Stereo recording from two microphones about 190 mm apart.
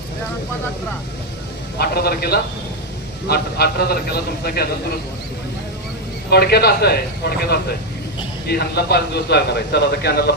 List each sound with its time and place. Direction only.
1.8 s a man's voice: 55° left (ahead or behind)
6.3 s a man's voice: 55° left (ahead or behind)